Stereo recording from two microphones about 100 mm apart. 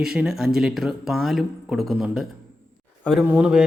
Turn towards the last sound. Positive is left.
turn(degrees=-10)  # may be behind; listen again after turning